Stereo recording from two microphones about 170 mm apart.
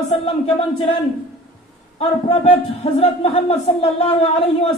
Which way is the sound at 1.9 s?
40° left (ahead or behind).